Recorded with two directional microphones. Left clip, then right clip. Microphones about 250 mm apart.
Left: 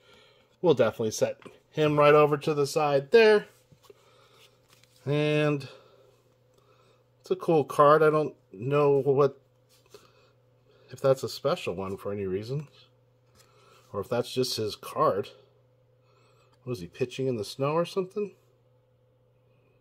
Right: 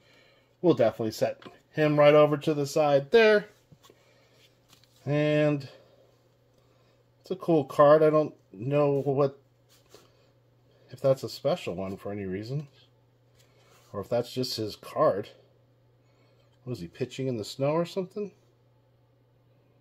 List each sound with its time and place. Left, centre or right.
0.2 s speech: left; by 3.3 s centre
5.0 s speech: left
7.4 s speech: left
10.9 s speech: left
13.9 s speech: left
16.9 s speech: left